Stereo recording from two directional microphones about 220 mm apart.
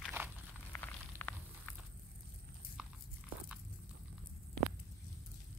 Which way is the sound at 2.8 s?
5° right (ahead or behind).